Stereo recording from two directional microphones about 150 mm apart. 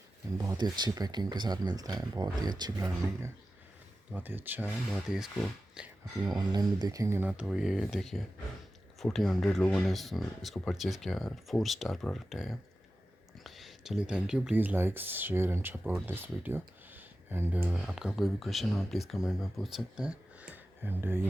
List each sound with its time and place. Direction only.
0.3 s speech: 25° right (ahead or behind)
4.1 s speech: 10° right (ahead or behind)
5.0 s speech: centre (ahead or behind)
6.2 s speech: 25° right (ahead or behind)